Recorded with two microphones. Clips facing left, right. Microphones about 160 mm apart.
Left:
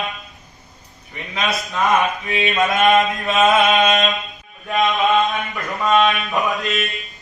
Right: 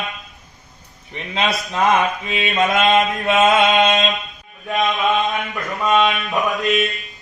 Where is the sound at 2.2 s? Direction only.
20° right (ahead or behind).